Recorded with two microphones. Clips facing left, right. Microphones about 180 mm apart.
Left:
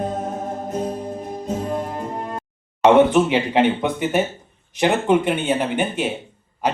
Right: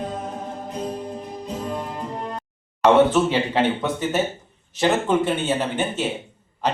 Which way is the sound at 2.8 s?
15° left (ahead or behind).